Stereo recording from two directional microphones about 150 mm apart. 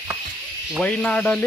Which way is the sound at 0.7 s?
5° left (ahead or behind).